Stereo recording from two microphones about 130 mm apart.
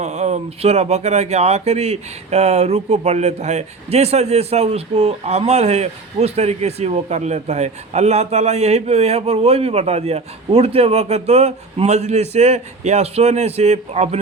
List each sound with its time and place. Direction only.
0.0 s speech: 60° right (ahead or behind)